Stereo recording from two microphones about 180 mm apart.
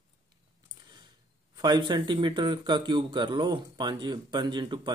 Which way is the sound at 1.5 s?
25° right (ahead or behind).